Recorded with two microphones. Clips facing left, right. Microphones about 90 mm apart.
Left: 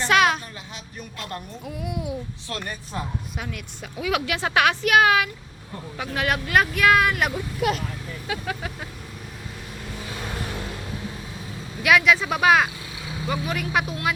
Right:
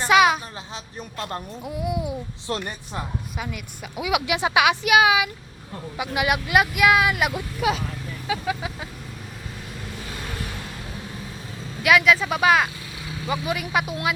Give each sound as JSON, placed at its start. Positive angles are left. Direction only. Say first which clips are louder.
{"t": 0.0, "sound": "a sound", "louder": "right 2 dB", "side_deg": -5}
{"t": 1.6, "sound": "speech", "louder": "right 4 dB", "side_deg": -5}
{"t": 2.5, "sound": "speech", "louder": "right 5 dB", "side_deg": -25}
{"t": 3.3, "sound": "speech", "louder": "right 1 dB", "side_deg": 0}
{"t": 11.8, "sound": "speech", "louder": "right 1 dB", "side_deg": 0}